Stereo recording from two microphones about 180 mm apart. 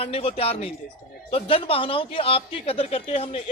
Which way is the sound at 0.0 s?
30° left (ahead or behind).